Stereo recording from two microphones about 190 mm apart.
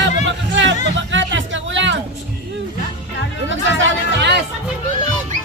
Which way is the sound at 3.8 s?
65° right (ahead or behind).